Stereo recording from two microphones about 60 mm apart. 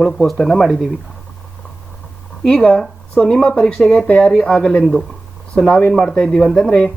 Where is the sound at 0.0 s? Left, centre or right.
Centre.